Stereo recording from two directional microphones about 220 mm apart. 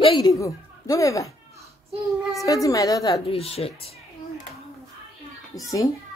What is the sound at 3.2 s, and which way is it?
Speech, 25° left (ahead or behind).